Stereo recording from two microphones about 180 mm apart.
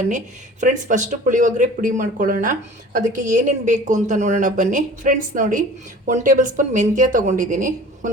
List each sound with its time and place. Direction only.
0.6 s speech: 45° right (ahead or behind)